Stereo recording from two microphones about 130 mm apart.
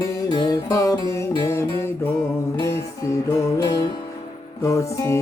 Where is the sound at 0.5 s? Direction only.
25° left (ahead or behind).